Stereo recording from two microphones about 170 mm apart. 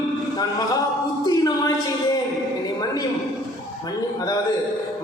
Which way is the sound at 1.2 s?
25° left (ahead or behind).